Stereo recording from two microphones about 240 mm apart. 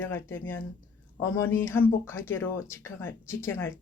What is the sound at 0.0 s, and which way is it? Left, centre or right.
Speech, centre.